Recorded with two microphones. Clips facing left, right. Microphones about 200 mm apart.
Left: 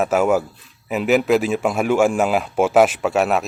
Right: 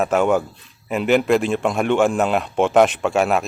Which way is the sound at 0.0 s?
5° left (ahead or behind).